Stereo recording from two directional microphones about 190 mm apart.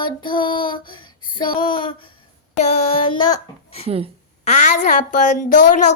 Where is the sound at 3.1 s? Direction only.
25° left (ahead or behind).